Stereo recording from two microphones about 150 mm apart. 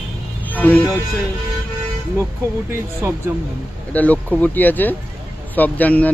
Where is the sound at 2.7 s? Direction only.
15° right (ahead or behind).